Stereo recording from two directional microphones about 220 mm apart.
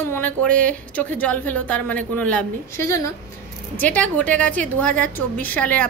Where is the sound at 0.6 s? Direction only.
5° left (ahead or behind).